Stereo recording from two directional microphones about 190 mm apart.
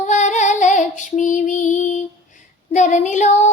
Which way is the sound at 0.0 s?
40° left (ahead or behind).